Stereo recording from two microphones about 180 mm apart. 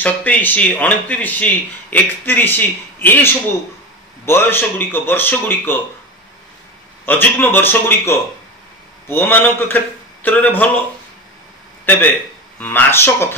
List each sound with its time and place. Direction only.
0.0 s speech: 10° left (ahead or behind)
7.1 s speech: 10° left (ahead or behind)
11.8 s speech: 10° left (ahead or behind)